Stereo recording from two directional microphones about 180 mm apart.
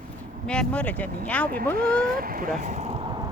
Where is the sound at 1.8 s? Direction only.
55° right (ahead or behind); by 3.3 s 25° right (ahead or behind).